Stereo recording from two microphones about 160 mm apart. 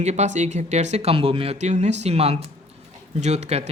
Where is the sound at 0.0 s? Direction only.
45° right (ahead or behind).